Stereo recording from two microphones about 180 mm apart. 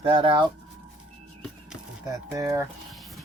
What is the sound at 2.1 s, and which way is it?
Speech, 20° right (ahead or behind).